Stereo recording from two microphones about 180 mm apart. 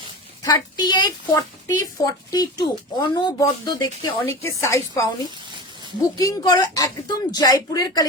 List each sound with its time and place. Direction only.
0.4 s a woman's voice: 25° left (ahead or behind)